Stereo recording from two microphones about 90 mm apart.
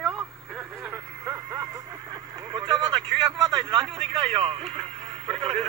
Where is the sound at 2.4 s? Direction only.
65° right (ahead or behind).